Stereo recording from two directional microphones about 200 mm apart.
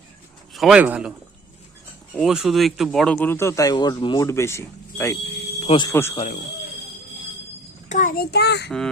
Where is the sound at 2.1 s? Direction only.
Centre (ahead or behind).